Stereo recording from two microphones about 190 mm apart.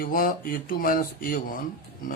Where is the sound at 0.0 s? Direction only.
50° left (ahead or behind).